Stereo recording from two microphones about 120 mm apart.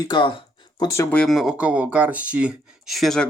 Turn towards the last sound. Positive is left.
turn(degrees=0)  # may be behind; listen again after turning